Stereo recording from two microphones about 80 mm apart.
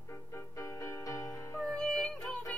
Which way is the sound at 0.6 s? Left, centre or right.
Left.